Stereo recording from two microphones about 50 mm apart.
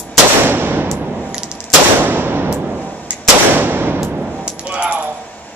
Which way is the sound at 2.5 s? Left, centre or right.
Right.